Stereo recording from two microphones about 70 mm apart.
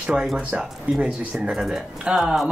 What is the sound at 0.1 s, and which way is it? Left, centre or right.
Speech, centre.